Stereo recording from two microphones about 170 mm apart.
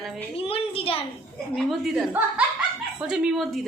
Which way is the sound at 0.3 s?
35° left (ahead or behind).